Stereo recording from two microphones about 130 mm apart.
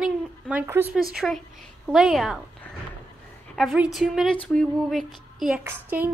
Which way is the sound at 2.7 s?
10° left (ahead or behind).